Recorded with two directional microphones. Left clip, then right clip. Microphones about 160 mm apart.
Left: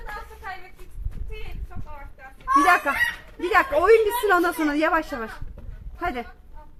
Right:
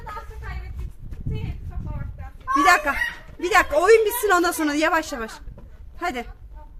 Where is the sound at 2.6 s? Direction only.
10° right (ahead or behind).